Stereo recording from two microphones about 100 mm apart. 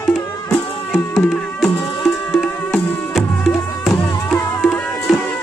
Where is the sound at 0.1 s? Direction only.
5° left (ahead or behind).